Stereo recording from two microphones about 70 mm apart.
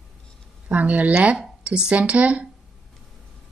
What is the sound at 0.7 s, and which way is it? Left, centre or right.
Speech, centre.